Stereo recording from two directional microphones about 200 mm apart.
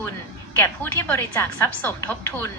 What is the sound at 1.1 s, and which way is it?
A woman's voice, 10° left (ahead or behind).